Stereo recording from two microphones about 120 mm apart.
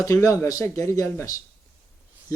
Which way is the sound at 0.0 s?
30° left (ahead or behind).